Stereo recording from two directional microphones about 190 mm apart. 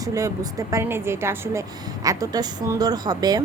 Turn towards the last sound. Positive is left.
turn(degrees=-20)  # may be behind; listen again after turning